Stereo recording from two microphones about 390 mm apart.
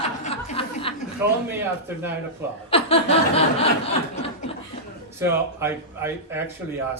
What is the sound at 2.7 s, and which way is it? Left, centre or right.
Chuckle, centre.